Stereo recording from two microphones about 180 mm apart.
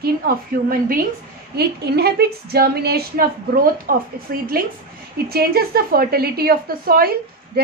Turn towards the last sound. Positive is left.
turn(degrees=-55)  # may be behind; listen again after turning